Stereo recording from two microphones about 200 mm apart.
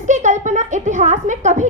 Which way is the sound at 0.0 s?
40° right (ahead or behind).